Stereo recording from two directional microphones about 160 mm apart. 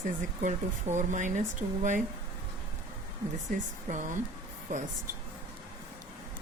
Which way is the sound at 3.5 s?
50° right (ahead or behind).